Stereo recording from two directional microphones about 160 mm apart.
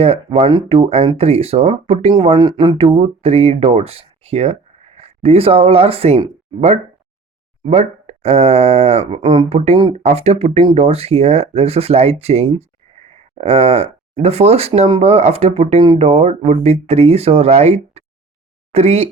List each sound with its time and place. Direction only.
0.0 s speech: 40° right (ahead or behind)
9.2 s speech: 30° right (ahead or behind)
9.9 s speech: 40° right (ahead or behind)